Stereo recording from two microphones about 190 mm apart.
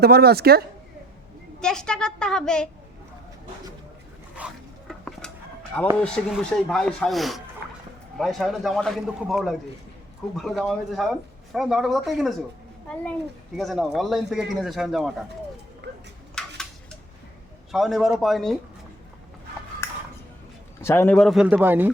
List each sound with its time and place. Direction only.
0.0 s speech: 55° right (ahead or behind)
1.6 s speech: 5° left (ahead or behind)
4.4 s a sound: centre (ahead or behind)
6.0 s speech: 5° left (ahead or behind)
13.6 s speech: centre (ahead or behind)
15.8 s a sound: 65° right (ahead or behind)
16.3 s a sound: 5° left (ahead or behind)
17.7 s speech: centre (ahead or behind)
20.8 s a man's voice: 15° left (ahead or behind)
21.2 s speech: centre (ahead or behind)